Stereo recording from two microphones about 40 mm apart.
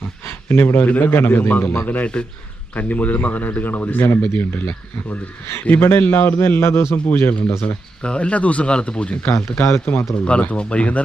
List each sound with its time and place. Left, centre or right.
0.3 s a sound: left
0.9 s speech: left
1.5 s a man's voice: left
5.8 s a man's voice: left
6.9 s speech: left
7.3 s a man's voice: left
8.7 s speech: left
9.2 s a man's voice: left
10.5 s a man's voice: left